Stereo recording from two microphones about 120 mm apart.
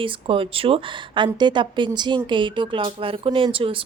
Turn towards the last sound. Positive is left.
turn(degrees=-50)  # may be behind; listen again after turning